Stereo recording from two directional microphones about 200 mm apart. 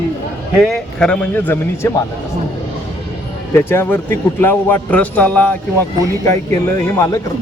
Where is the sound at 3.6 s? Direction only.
10° left (ahead or behind).